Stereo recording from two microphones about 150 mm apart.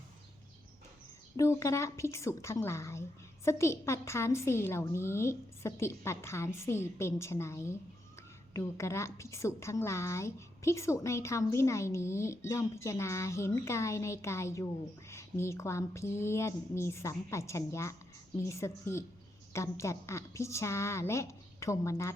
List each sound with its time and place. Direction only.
1.4 s a woman's voice: 20° left (ahead or behind)